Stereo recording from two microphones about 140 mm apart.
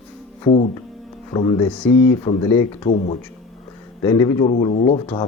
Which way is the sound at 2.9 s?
65° left (ahead or behind).